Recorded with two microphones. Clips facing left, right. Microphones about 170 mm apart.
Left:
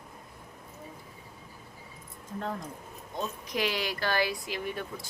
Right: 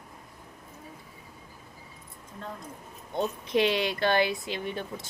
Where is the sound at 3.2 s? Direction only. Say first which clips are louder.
Right 6 dB; 25° right (ahead or behind).